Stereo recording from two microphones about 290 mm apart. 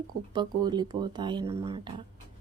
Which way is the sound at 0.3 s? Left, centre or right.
Centre.